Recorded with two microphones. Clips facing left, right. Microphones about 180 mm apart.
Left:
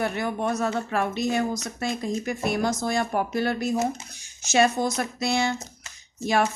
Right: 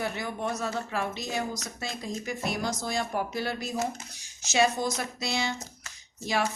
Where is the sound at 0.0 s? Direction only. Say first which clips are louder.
Left 5 dB; 55° left (ahead or behind).